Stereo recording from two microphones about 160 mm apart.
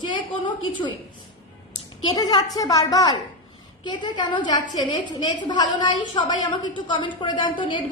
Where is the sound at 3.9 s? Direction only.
30° left (ahead or behind).